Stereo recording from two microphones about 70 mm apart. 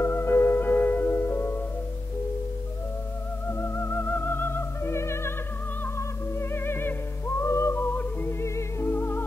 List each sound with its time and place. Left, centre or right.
0.0 s music: left
3.4 s music: left